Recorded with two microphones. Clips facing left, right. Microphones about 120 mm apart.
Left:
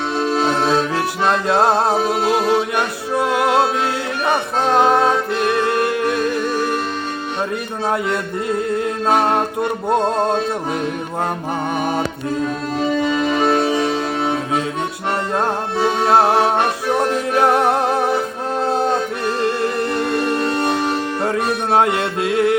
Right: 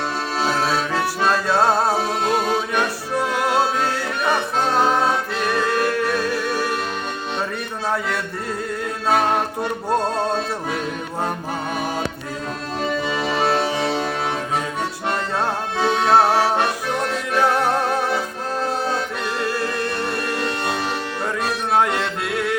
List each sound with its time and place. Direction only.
0.3 s accordion: 20° left (ahead or behind)
1.2 s music: 20° left (ahead or behind)
7.9 s music: 15° left (ahead or behind)
15.4 s music: 15° left (ahead or behind)
19.4 s music: 25° left (ahead or behind)